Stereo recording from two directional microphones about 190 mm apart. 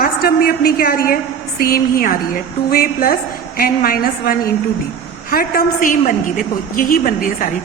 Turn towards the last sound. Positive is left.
turn(degrees=45)  # may be behind; listen again after turning